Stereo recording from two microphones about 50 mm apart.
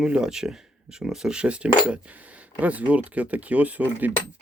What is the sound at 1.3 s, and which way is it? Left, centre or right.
Speech, right.